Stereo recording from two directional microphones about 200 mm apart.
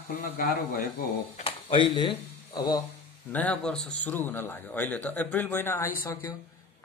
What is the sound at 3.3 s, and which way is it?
Speech, 5° left (ahead or behind).